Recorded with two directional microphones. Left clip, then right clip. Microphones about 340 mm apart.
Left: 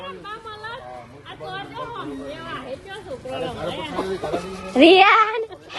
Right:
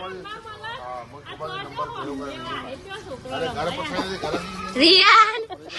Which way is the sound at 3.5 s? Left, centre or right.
Right.